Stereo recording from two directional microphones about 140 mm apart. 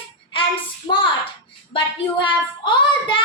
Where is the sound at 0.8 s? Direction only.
35° left (ahead or behind).